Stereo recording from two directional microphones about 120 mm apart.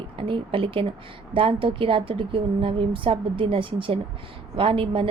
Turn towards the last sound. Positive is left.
turn(degrees=-50)  # may be behind; listen again after turning